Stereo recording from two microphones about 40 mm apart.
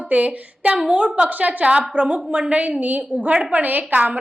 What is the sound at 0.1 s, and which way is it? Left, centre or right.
A woman's voice, right.